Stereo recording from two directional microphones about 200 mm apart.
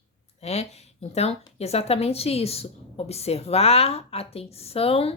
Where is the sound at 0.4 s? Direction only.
30° left (ahead or behind).